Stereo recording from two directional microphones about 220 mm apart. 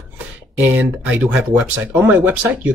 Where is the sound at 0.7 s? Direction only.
5° right (ahead or behind).